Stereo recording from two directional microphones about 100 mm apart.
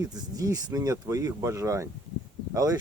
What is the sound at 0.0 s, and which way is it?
Speech, 35° right (ahead or behind).